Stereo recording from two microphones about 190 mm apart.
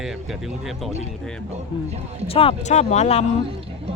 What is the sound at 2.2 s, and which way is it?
Speech, 30° left (ahead or behind).